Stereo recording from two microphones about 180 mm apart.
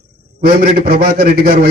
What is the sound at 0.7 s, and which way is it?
Speech, 55° right (ahead or behind).